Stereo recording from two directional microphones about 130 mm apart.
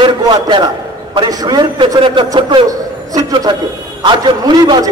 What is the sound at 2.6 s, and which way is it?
A man's voice, 30° right (ahead or behind).